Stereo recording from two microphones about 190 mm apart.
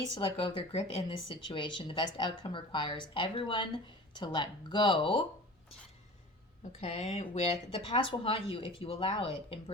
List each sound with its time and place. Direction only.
0.0 s speech: 25° left (ahead or behind)
6.7 s speech: 35° left (ahead or behind)